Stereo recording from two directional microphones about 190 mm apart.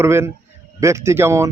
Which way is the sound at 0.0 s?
15° right (ahead or behind).